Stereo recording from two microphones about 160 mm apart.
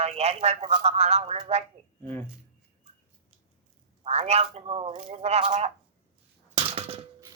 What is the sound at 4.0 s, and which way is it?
Speech, 40° right (ahead or behind).